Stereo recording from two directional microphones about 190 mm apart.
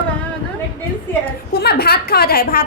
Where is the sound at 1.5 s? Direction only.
55° left (ahead or behind).